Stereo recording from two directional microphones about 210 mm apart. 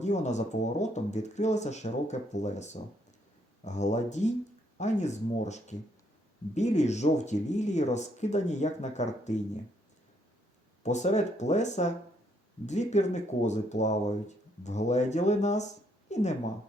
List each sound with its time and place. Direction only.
0.0 s speech: 35° left (ahead or behind)
10.8 s a woman's voice: 35° left (ahead or behind)